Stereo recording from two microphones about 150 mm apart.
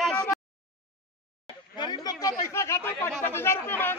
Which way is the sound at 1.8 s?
25° left (ahead or behind).